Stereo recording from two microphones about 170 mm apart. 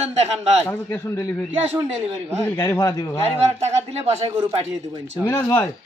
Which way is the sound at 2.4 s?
15° left (ahead or behind).